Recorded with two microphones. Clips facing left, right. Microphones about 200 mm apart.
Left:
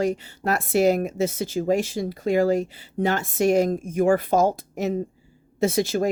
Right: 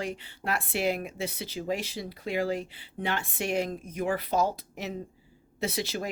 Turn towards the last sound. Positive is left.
turn(degrees=45)  # may be behind; listen again after turning